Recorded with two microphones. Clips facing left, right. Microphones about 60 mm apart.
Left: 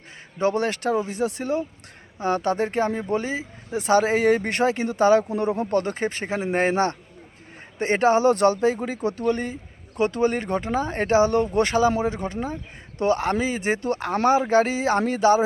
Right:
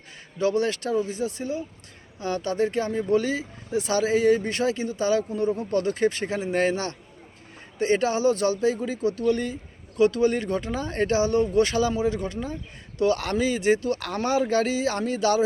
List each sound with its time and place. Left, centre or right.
0.3 s speech: left
2.1 s speech: left
3.7 s speech: left
5.7 s speech: left
9.3 s speech: left